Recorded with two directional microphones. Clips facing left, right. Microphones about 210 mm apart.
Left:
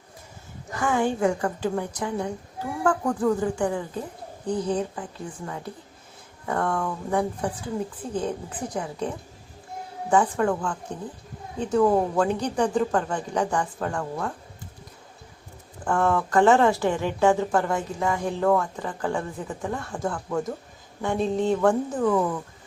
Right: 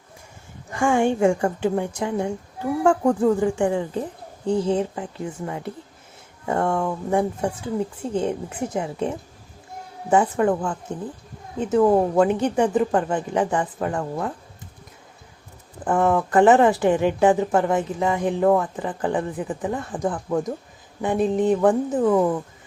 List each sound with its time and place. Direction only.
0.7 s a woman's voice: 25° right (ahead or behind)
15.8 s a woman's voice: 20° right (ahead or behind)